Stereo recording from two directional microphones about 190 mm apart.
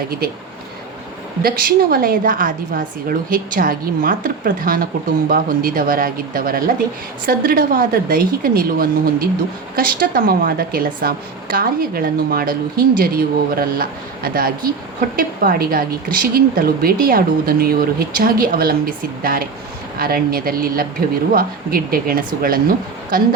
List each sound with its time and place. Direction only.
1.4 s a woman's voice: 50° right (ahead or behind)